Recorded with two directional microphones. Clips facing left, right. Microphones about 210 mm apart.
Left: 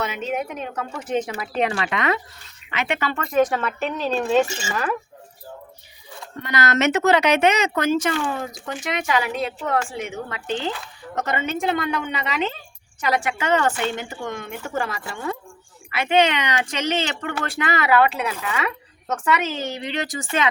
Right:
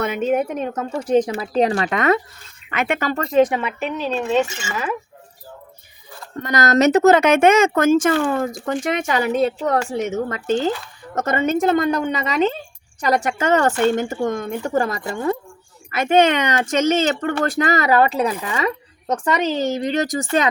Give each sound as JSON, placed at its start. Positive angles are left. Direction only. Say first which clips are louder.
{"t": 0.0, "sound": "speech", "louder": "right 7 dB", "side_deg": -50}
{"t": 3.5, "sound": "a woman's voice", "louder": "right 1 dB", "side_deg": -10}
{"t": 4.4, "sound": "speech", "louder": "left 2 dB", "side_deg": 35}
{"t": 4.7, "sound": "a woman's voice", "louder": "even", "side_deg": 0}
{"t": 6.4, "sound": "a woman's voice", "louder": "right 5 dB", "side_deg": -40}
{"t": 18.5, "sound": "a sound", "louder": "right 4 dB", "side_deg": -35}
{"t": 19.2, "sound": "a woman's voice", "louder": "right 4 dB", "side_deg": -35}